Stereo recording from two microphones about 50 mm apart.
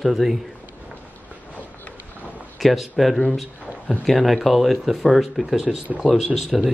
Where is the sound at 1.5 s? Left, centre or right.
Left.